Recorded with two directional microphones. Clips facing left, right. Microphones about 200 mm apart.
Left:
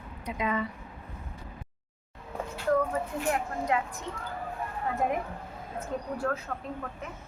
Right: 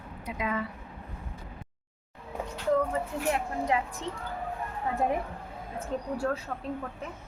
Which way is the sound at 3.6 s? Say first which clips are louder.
Right 1 dB; 30° right (ahead or behind).